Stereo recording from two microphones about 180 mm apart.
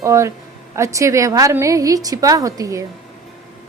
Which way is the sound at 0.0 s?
15° right (ahead or behind).